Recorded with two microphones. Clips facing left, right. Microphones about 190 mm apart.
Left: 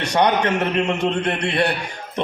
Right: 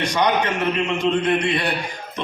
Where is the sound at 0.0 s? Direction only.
65° left (ahead or behind).